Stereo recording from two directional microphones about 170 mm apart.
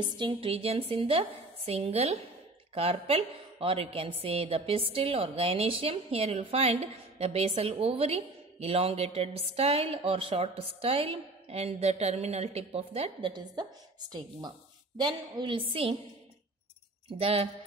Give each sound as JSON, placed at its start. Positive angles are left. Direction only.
{"t": 0.0, "sound": "a woman's voice", "side_deg": -30}
{"t": 15.0, "sound": "a woman's voice", "side_deg": -25}
{"t": 17.2, "sound": "a woman's voice", "side_deg": -35}